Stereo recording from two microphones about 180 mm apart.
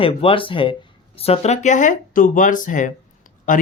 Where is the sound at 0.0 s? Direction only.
30° left (ahead or behind).